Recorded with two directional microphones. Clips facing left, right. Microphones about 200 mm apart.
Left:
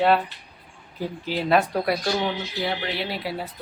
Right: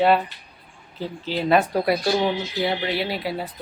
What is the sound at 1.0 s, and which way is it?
Speech, 10° left (ahead or behind).